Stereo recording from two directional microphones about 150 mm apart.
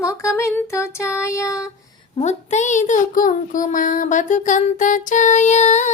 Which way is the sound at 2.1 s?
50° left (ahead or behind).